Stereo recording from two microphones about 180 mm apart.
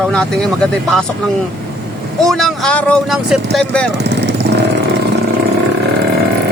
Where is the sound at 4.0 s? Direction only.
70° right (ahead or behind).